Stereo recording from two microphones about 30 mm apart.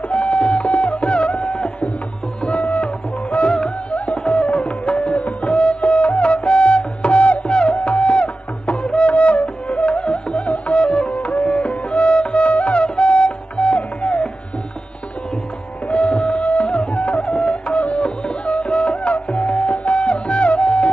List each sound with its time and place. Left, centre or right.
0.1 s music: left
2.4 s music: left
11.1 s music: left
15.9 s music: left